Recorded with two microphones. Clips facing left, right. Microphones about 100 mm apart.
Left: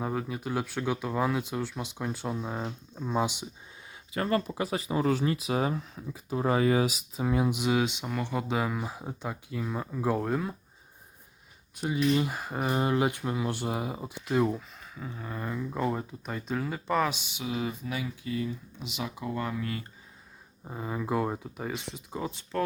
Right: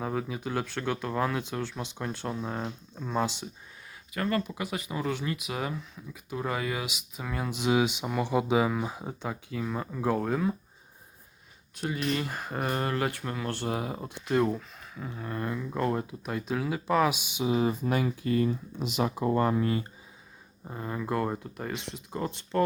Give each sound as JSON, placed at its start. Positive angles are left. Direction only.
{"t": 0.0, "sound": "speech", "side_deg": 0}
{"t": 4.1, "sound": "speech", "side_deg": 25}
{"t": 7.2, "sound": "speech", "side_deg": 20}
{"t": 7.6, "sound": "speech", "side_deg": -5}
{"t": 12.1, "sound": "speech", "side_deg": 10}
{"t": 17.4, "sound": "speech", "side_deg": -30}
{"t": 17.8, "sound": "speech", "side_deg": -50}
{"t": 20.7, "sound": "speech", "side_deg": 5}